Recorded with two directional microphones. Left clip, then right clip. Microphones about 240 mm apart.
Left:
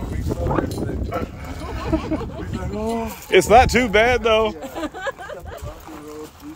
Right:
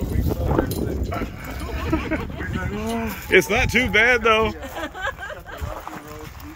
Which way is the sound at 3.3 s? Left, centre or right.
Centre.